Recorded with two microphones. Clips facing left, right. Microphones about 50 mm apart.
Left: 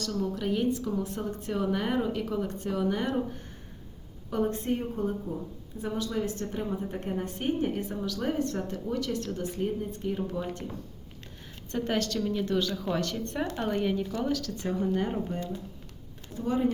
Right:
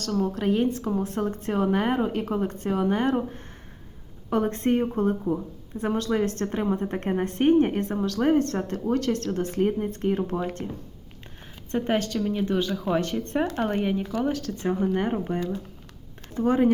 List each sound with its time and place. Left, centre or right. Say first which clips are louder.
0.0 s speech: right 5 dB; right
10.3 s speech: right 5 dB; right
11.7 s speech: right 4 dB; right
16.3 s speech: right 7 dB; right